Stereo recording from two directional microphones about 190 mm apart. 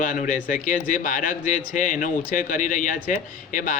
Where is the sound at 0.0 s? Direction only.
45° left (ahead or behind).